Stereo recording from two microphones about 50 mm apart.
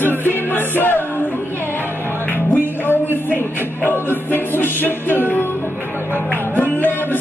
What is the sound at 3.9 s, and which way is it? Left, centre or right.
Music, left.